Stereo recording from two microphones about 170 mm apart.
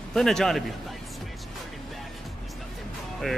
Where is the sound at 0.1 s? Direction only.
Centre (ahead or behind).